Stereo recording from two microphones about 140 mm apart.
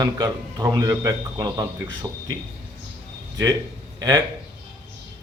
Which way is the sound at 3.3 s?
25° right (ahead or behind).